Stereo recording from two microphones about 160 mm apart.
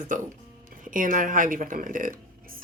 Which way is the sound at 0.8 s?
55° right (ahead or behind).